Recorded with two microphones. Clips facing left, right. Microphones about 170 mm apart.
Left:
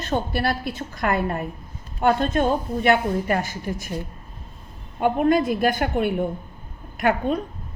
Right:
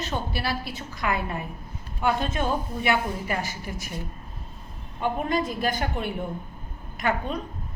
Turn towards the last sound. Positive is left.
turn(degrees=55)  # may be behind; listen again after turning